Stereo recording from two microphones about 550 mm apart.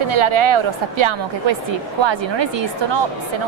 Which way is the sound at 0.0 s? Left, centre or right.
Right.